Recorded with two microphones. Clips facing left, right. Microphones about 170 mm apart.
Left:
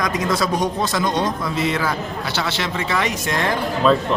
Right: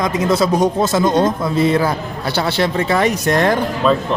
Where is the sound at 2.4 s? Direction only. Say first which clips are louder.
Right 8 dB; 40° right (ahead or behind).